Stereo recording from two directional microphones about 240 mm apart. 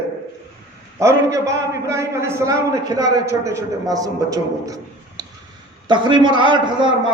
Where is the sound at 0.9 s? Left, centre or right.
Centre.